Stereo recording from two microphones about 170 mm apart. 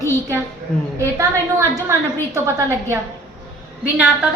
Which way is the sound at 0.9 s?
15° right (ahead or behind).